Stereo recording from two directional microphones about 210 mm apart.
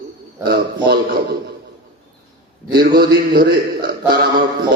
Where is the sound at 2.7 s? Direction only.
45° right (ahead or behind).